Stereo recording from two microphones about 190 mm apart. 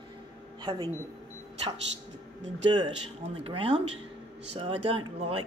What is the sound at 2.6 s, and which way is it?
Speech, 25° right (ahead or behind).